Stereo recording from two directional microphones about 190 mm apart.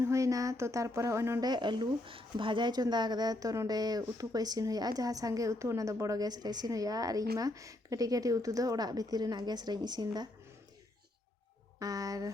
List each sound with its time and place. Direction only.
0.0 s speech: 15° right (ahead or behind)
11.8 s speech: 20° right (ahead or behind)